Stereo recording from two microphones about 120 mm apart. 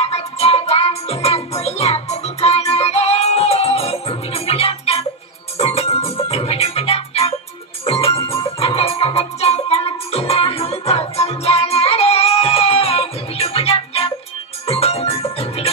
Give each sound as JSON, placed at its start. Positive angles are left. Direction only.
{"t": 0.0, "sound": "music", "side_deg": 60}